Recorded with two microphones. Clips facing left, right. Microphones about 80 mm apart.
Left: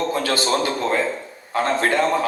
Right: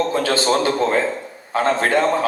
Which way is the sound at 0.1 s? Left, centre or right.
Right.